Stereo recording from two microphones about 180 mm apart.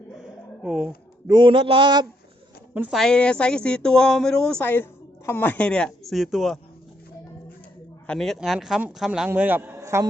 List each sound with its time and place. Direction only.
0.2 s a sound: 5° right (ahead or behind)
1.3 s a man's voice: 25° right (ahead or behind)
2.7 s speech: 10° right (ahead or behind)
3.0 s speech: 5° left (ahead or behind)
8.0 s speech: 5° left (ahead or behind); by 10.1 s 15° right (ahead or behind)